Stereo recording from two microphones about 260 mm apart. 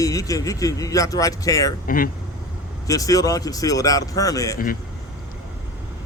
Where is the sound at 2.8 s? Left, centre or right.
Centre.